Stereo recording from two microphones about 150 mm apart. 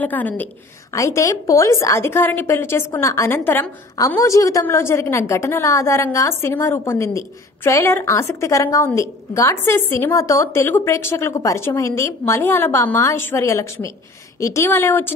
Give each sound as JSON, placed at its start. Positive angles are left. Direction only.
{"t": 0.0, "sound": "a woman's voice", "side_deg": 10}